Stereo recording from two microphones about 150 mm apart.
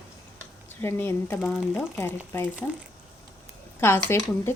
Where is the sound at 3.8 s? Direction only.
15° left (ahead or behind).